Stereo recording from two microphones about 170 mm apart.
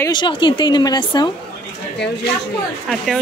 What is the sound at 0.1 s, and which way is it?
A woman's voice, 30° left (ahead or behind).